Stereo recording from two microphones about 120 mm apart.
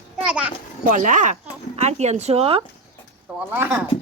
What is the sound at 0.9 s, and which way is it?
Speech, 90° right.